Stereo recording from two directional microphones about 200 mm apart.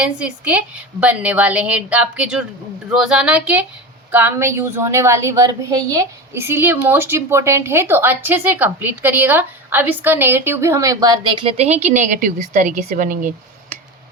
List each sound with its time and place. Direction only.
0.0 s a woman's voice: 5° right (ahead or behind); by 13.7 s 40° right (ahead or behind)